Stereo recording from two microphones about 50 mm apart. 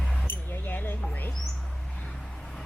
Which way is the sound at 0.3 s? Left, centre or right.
Left.